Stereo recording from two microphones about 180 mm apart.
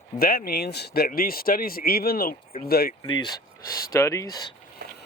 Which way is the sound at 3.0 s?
25° left (ahead or behind).